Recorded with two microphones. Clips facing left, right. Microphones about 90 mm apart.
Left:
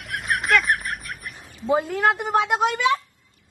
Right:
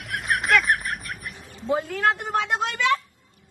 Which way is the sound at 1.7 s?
15° left (ahead or behind).